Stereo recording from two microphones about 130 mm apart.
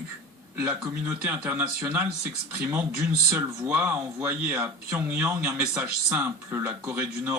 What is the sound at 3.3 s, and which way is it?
Speech, 20° right (ahead or behind).